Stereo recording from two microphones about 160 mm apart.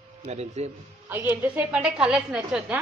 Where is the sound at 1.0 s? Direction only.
15° right (ahead or behind).